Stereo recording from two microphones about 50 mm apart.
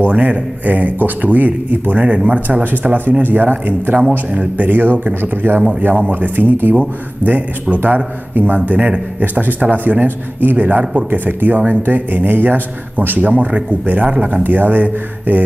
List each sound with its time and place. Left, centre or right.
0.1 s a man's voice: right
4.3 s speech: right
4.6 s a man's voice: right